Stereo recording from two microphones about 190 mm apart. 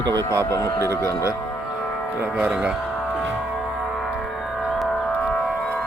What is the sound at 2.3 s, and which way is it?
Speech, 5° right (ahead or behind).